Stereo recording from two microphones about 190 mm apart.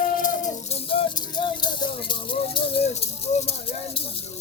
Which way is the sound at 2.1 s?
25° left (ahead or behind).